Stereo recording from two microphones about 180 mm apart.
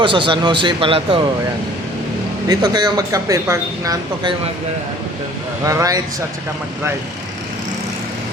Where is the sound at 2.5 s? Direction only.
25° right (ahead or behind).